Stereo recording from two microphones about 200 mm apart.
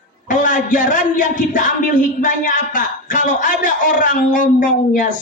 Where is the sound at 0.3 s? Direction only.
40° left (ahead or behind).